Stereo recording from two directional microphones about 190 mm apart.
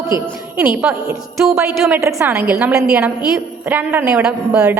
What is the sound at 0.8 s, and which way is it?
A woman's voice, 5° right (ahead or behind).